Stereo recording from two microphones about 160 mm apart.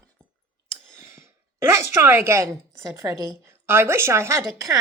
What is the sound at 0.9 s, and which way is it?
A child's voice, 15° right (ahead or behind).